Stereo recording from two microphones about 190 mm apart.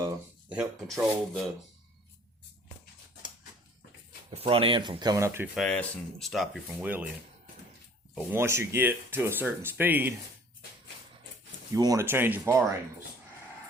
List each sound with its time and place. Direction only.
0.0 s rub: 5° right (ahead or behind)
4.3 s speech: 30° right (ahead or behind); by 5.5 s 15° right (ahead or behind)
5.5 s speech: 5° left (ahead or behind)
8.1 s speech: 10° right (ahead or behind)
11.7 s speech: 20° right (ahead or behind)